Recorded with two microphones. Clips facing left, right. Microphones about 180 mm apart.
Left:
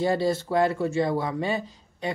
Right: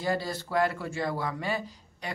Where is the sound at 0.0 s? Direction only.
25° left (ahead or behind).